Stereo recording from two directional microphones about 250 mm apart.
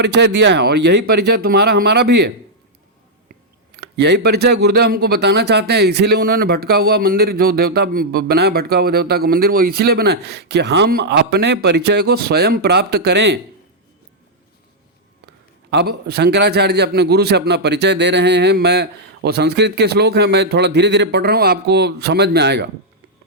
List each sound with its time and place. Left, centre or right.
0.0 s speech: right
3.9 s speech: right
15.7 s speech: right